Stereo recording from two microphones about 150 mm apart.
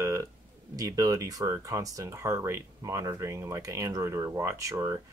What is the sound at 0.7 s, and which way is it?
Speech, 20° right (ahead or behind).